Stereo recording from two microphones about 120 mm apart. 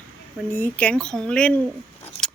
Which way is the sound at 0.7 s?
10° left (ahead or behind).